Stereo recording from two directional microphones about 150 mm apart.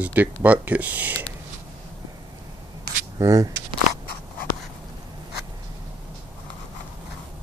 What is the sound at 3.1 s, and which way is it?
Speech, 25° right (ahead or behind).